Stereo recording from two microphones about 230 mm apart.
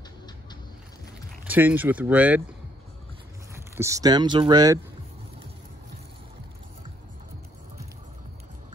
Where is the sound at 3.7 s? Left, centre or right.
Centre.